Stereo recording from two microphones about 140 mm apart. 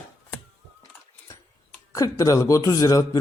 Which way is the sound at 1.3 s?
20° left (ahead or behind).